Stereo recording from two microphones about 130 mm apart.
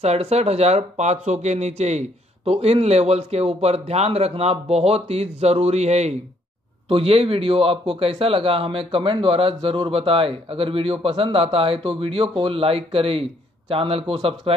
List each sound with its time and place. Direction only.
0.0 s speech: 55° right (ahead or behind)